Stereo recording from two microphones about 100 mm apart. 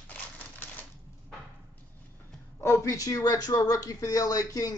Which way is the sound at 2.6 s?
30° left (ahead or behind).